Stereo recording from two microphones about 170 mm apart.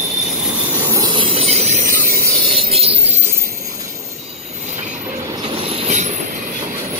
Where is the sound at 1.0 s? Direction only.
30° right (ahead or behind).